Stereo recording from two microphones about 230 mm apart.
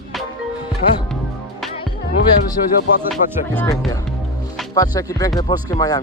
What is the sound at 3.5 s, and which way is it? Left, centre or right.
Speech, centre.